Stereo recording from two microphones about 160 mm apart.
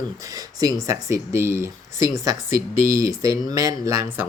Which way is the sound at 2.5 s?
65° right (ahead or behind).